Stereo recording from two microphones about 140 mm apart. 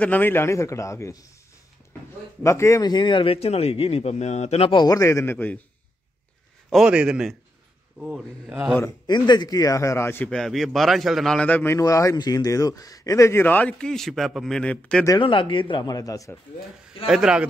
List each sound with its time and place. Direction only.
0.0 s a man's voice: 15° left (ahead or behind)
2.4 s a man's voice: 20° left (ahead or behind)
6.7 s a man's voice: 5° right (ahead or behind)
9.0 s a man's voice: 30° left (ahead or behind); by 10.3 s 15° left (ahead or behind)
10.3 s a man's voice: centre (ahead or behind)
15.1 s a man's voice: 35° left (ahead or behind)
17.0 s a man's voice: 5° right (ahead or behind)